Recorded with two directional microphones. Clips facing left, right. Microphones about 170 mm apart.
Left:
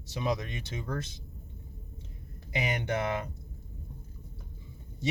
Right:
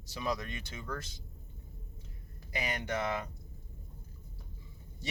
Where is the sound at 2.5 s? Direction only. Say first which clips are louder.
Left 4 dB; 20° left (ahead or behind).